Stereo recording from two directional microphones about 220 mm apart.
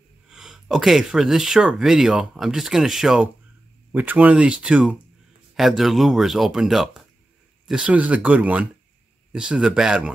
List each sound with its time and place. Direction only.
0.3 s speech: centre (ahead or behind)